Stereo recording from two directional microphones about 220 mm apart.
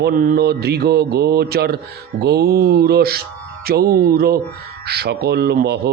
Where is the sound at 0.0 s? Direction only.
45° right (ahead or behind).